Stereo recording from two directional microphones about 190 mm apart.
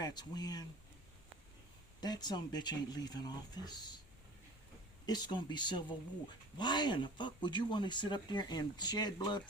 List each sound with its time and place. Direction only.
0.0 s speech: 20° left (ahead or behind)
2.0 s speech: 20° left (ahead or behind)
5.0 s speech: 20° left (ahead or behind)